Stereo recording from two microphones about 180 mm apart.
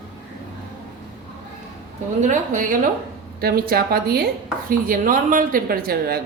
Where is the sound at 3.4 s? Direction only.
55° right (ahead or behind).